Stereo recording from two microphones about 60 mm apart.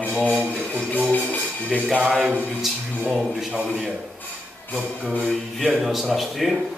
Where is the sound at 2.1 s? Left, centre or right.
Centre.